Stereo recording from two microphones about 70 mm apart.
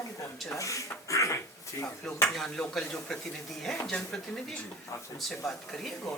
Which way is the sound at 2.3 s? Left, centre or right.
Centre.